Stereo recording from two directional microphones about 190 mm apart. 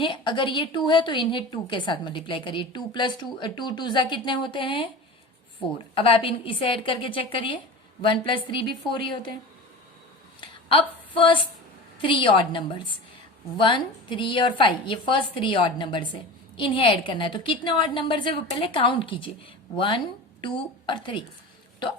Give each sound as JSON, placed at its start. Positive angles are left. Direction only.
{"t": 0.0, "sound": "a woman's voice", "side_deg": 25}
{"t": 10.4, "sound": "a sound", "side_deg": 25}
{"t": 12.0, "sound": "a woman's voice", "side_deg": 25}